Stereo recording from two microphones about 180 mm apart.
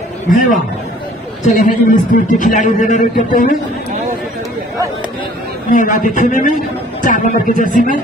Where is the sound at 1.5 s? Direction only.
45° left (ahead or behind).